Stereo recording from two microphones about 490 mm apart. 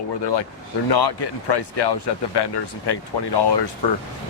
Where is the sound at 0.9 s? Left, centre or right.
Left.